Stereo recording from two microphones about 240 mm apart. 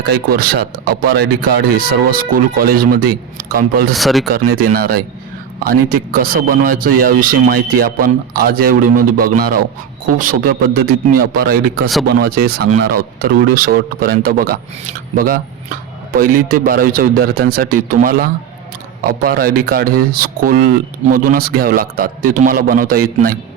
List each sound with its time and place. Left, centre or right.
0.1 s speech: right
3.9 s speech: centre
4.3 s speech: right